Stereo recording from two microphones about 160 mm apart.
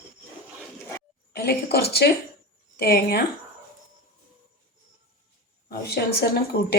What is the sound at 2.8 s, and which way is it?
Speech, 75° left (ahead or behind).